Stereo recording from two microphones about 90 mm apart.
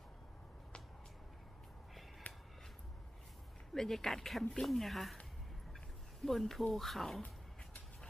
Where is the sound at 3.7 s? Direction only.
5° left (ahead or behind).